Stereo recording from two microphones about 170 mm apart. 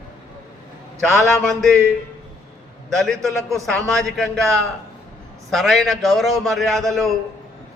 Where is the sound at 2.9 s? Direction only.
Centre (ahead or behind).